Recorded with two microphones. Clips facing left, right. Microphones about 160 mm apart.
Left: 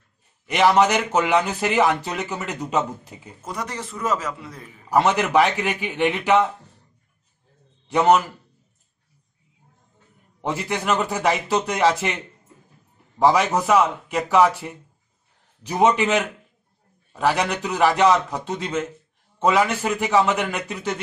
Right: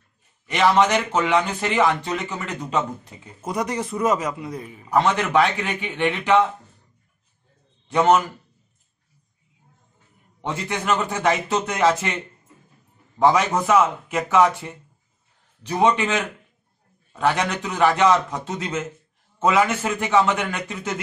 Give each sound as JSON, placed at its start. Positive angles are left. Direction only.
{"t": 0.5, "sound": "a man's voice", "side_deg": 10}
{"t": 3.4, "sound": "a man's voice", "side_deg": -15}
{"t": 4.8, "sound": "a man's voice", "side_deg": 5}
{"t": 7.9, "sound": "a man's voice", "side_deg": 0}
{"t": 10.4, "sound": "a man's voice", "side_deg": 5}
{"t": 13.2, "sound": "a man's voice", "side_deg": 0}
{"t": 17.2, "sound": "a man's voice", "side_deg": 5}